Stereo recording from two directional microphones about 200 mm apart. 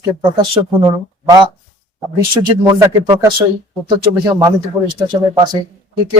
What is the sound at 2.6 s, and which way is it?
Speech, 25° right (ahead or behind).